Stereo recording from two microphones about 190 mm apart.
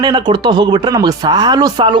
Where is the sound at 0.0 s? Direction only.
20° right (ahead or behind).